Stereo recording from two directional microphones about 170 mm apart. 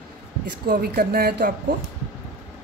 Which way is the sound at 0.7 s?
60° right (ahead or behind).